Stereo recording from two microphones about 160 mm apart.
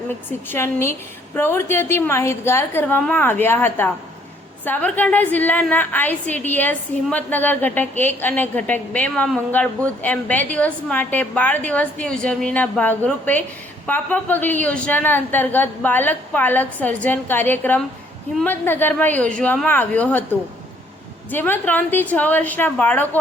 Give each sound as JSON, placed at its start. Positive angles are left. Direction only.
{"t": 0.3, "sound": "a woman's voice", "side_deg": 15}
{"t": 21.2, "sound": "a woman's voice", "side_deg": 10}